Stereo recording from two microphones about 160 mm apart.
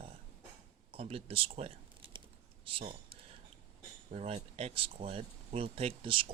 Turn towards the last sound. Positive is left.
turn(degrees=-35)  # may be behind; listen again after turning